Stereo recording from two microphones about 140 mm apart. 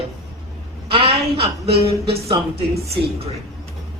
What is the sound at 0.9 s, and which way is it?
Speech, 40° right (ahead or behind).